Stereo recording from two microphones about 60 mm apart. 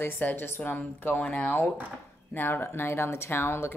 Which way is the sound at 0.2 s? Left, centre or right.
Left.